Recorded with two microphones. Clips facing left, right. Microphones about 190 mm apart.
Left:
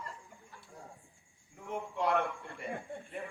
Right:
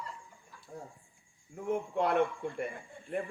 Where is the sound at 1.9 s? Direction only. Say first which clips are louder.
Right 2 dB; 55° right (ahead or behind).